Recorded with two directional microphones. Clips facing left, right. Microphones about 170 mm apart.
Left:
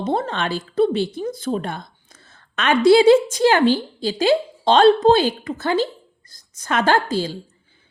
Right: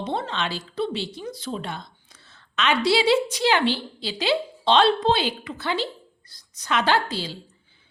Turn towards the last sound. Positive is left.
turn(degrees=45)  # may be behind; listen again after turning